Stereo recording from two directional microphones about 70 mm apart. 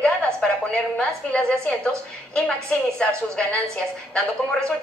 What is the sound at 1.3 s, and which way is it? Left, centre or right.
A woman's voice, centre.